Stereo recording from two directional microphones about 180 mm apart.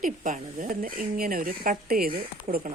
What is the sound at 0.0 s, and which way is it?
A woman's voice, 45° right (ahead or behind).